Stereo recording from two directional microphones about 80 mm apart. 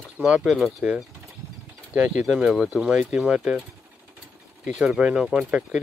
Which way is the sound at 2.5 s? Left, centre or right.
Centre.